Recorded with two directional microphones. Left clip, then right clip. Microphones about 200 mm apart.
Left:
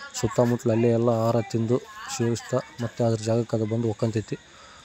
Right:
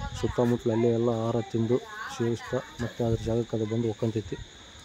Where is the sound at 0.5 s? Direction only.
20° left (ahead or behind).